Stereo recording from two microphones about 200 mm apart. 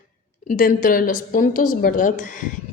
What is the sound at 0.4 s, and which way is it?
Speech, 40° left (ahead or behind).